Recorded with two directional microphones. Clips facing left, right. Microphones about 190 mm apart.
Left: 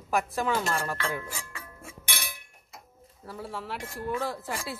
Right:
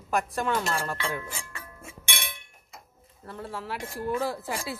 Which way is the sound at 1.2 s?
20° right (ahead or behind).